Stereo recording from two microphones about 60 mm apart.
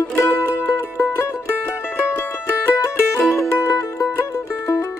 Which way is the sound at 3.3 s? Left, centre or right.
Left.